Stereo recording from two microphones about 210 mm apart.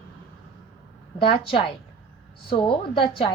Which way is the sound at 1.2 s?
25° left (ahead or behind).